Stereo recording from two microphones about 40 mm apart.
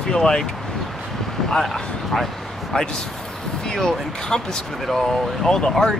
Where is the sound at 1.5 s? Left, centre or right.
Centre.